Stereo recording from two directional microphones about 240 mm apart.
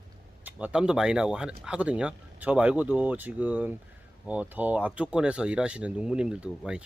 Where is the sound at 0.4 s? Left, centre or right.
Centre.